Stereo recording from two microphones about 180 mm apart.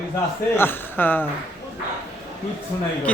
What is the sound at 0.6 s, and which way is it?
Speech, 10° left (ahead or behind).